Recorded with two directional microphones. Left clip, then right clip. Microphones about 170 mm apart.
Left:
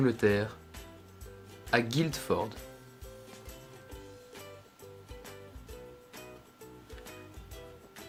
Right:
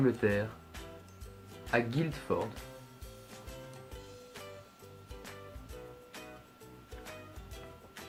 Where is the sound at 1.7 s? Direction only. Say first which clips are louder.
Left 3 dB; 90° left.